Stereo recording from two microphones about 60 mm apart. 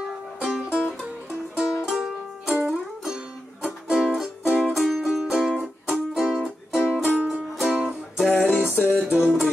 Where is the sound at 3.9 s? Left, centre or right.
Centre.